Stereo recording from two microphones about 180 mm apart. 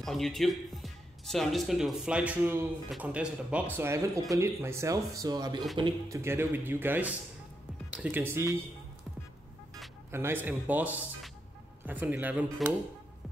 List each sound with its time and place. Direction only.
0.0 s speech: centre (ahead or behind)
10.1 s speech: 10° right (ahead or behind)